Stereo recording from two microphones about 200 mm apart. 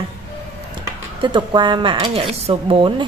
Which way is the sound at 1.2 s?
25° right (ahead or behind).